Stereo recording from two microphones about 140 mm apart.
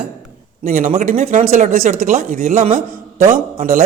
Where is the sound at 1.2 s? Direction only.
50° right (ahead or behind); by 2.5 s 90° right.